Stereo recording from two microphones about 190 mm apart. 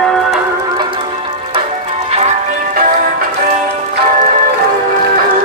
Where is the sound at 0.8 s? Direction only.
25° right (ahead or behind); by 3.6 s 45° right (ahead or behind).